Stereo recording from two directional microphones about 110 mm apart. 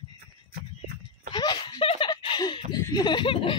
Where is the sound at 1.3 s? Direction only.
40° left (ahead or behind).